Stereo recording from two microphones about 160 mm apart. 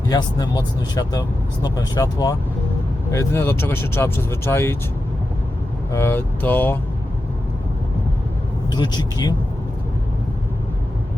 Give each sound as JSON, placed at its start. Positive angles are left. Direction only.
{"t": 0.1, "sound": "speech", "side_deg": 25}
{"t": 5.9, "sound": "speech", "side_deg": 15}
{"t": 8.7, "sound": "speech", "side_deg": 25}